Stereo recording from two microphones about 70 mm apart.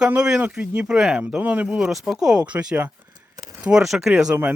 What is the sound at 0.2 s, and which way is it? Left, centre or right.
Speech, centre.